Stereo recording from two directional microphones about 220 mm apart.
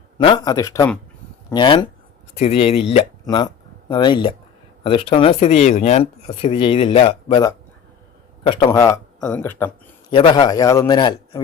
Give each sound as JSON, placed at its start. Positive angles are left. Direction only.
{"t": 0.2, "sound": "speech", "side_deg": 20}
{"t": 10.1, "sound": "speech", "side_deg": 20}